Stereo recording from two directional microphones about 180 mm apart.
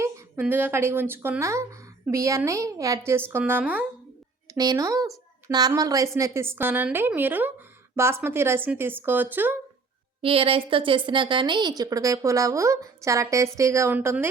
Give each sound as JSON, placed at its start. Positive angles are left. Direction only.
{"t": 0.0, "sound": "a woman's voice", "side_deg": -10}
{"t": 4.4, "sound": "a woman's voice", "side_deg": -20}
{"t": 10.2, "sound": "a woman's voice", "side_deg": -30}